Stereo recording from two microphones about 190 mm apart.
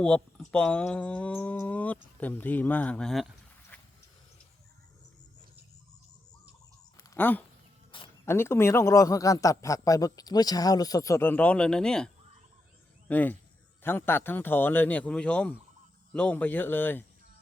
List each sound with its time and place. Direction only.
0.0 s a man's voice: 5° left (ahead or behind)
3.7 s horse: 10° left (ahead or behind)
7.2 s a man's voice: 10° left (ahead or behind)